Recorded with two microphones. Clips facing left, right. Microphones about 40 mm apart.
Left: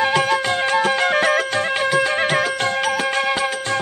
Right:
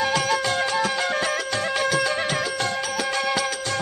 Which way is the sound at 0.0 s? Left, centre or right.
Left.